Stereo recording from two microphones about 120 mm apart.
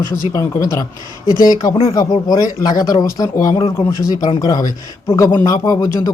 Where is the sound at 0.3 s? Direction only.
30° left (ahead or behind).